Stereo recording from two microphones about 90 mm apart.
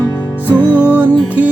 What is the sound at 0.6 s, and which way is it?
Music, 20° left (ahead or behind).